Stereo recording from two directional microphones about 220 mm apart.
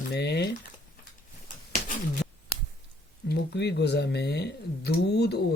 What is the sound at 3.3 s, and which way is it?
Speech, 50° left (ahead or behind).